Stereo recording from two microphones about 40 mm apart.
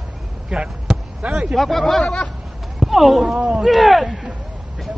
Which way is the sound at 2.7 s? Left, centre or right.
Centre.